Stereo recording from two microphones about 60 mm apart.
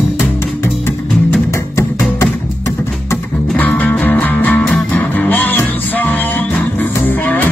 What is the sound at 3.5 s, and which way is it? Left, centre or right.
Music, left.